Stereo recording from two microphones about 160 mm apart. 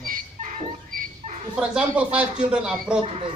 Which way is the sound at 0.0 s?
60° right (ahead or behind).